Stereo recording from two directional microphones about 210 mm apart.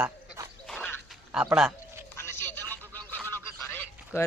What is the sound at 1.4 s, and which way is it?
Speech, 5° right (ahead or behind).